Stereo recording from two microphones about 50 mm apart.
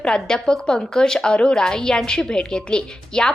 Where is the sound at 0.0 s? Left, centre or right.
Centre.